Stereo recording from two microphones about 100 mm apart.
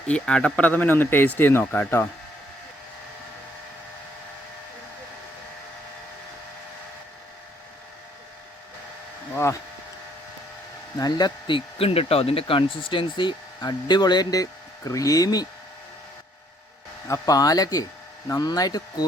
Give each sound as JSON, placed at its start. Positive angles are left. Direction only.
{"t": 0.1, "sound": "speech", "side_deg": 10}
{"t": 9.3, "sound": "a sound", "side_deg": 30}
{"t": 10.9, "sound": "speech", "side_deg": 40}
{"t": 17.1, "sound": "speech", "side_deg": 35}